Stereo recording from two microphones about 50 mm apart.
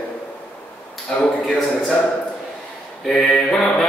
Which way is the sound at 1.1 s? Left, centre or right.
Centre.